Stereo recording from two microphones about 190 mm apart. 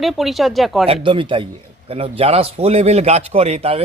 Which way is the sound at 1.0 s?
25° right (ahead or behind).